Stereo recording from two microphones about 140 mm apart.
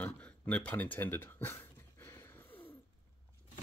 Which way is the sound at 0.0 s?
10° left (ahead or behind).